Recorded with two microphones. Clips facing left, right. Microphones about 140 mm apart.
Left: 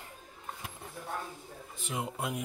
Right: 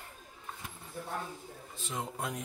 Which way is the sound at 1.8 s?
10° left (ahead or behind).